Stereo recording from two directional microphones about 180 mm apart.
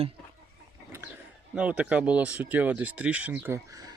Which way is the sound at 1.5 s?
5° right (ahead or behind).